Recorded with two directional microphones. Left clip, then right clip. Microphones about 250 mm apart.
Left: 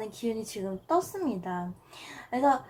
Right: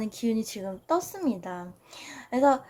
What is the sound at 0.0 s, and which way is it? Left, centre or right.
Speech, right.